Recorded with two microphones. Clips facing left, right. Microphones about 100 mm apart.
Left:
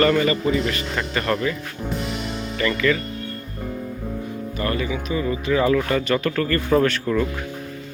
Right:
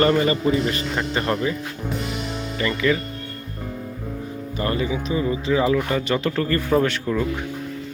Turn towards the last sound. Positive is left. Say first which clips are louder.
# left 1 dB
turn(degrees=-10)  # may be behind; listen again after turning